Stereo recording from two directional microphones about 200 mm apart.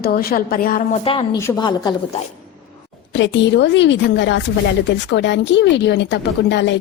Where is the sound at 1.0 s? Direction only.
25° left (ahead or behind).